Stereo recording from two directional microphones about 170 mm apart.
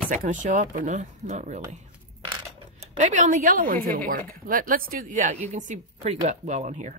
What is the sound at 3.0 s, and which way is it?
A woman's voice, 45° right (ahead or behind).